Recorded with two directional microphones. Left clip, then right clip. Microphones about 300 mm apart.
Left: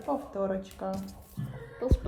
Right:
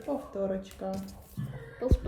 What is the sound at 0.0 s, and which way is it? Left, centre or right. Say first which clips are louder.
Speech: left 2 dB; centre.